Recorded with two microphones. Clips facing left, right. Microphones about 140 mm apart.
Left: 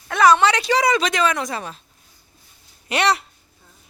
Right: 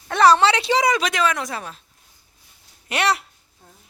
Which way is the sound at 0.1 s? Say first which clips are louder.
Even; 30° right (ahead or behind).